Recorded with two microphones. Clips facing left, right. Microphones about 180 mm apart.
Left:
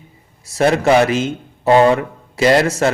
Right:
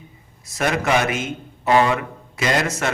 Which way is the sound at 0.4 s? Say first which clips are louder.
Left 7 dB; 30° left (ahead or behind).